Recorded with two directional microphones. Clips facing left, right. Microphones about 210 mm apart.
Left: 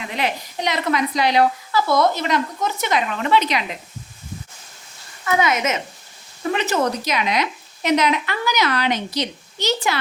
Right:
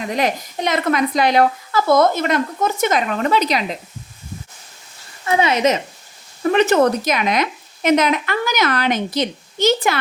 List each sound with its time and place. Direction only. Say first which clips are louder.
0.1 s a woman's voice: right 4 dB; 45° right (ahead or behind)
5.2 s speech: right 4 dB; 30° right (ahead or behind)
6.5 s a woman's voice: right 7 dB; 55° right (ahead or behind)